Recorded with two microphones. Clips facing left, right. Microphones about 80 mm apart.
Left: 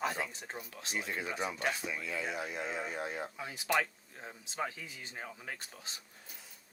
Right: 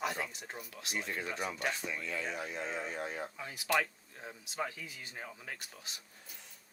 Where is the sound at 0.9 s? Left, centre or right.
Centre.